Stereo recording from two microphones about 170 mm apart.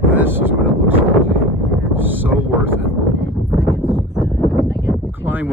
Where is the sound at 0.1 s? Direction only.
10° right (ahead or behind).